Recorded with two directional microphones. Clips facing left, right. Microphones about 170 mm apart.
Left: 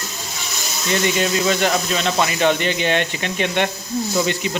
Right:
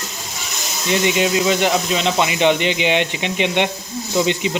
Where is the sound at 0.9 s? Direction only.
15° right (ahead or behind).